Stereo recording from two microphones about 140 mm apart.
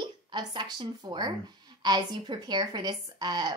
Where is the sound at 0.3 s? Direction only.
30° right (ahead or behind).